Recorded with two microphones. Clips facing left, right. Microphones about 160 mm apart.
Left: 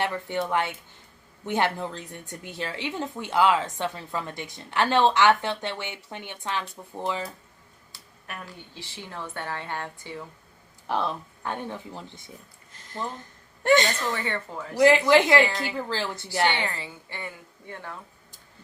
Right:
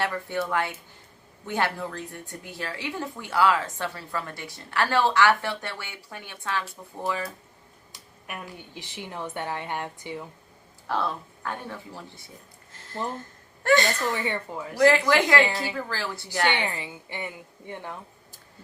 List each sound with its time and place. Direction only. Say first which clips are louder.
0.0 s a woman's voice: left 1 dB; 20° left (ahead or behind)
7.9 s a woman's voice: right 1 dB; 15° right (ahead or behind)
10.8 s a woman's voice: left 1 dB; 20° left (ahead or behind)
12.7 s a sound: right 2 dB; 20° left (ahead or behind)
13.7 s a woman's voice: left 1 dB; 20° left (ahead or behind)
14.0 s a woman's voice: right 1 dB; 20° right (ahead or behind)
14.8 s a woman's voice: left 2 dB; 15° left (ahead or behind)
16.5 s a woman's voice: right 1 dB; 20° right (ahead or behind)